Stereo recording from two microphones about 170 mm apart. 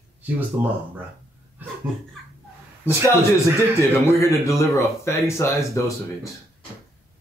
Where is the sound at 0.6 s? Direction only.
10° right (ahead or behind).